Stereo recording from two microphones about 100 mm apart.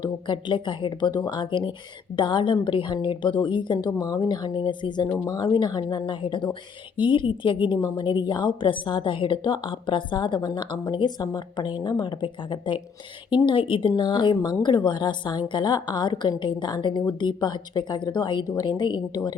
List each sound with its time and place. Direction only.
0.0 s a woman's voice: 50° left (ahead or behind)